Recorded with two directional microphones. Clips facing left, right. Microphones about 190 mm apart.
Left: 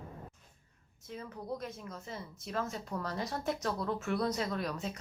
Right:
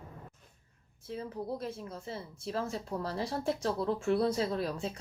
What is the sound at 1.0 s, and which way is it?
A woman's voice, 30° right (ahead or behind).